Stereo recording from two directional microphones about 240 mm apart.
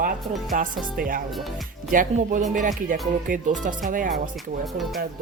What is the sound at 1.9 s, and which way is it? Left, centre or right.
Speech, right.